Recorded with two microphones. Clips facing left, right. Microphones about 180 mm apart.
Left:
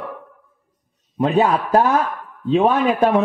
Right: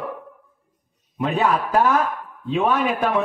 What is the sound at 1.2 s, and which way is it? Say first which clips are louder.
A man's voice: left 4 dB; 35° left (ahead or behind).